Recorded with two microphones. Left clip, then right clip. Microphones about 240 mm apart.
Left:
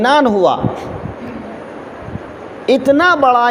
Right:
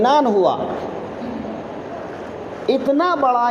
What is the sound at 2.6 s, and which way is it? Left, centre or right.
Speech, left.